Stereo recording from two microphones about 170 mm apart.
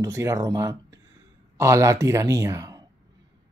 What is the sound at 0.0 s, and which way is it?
A man's voice, 20° right (ahead or behind).